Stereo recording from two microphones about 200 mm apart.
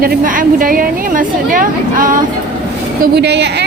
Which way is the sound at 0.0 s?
45° right (ahead or behind).